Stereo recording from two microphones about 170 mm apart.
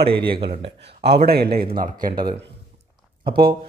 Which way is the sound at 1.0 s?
70° right (ahead or behind).